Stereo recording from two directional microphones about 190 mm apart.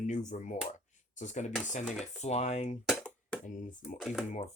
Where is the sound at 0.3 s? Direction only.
40° left (ahead or behind).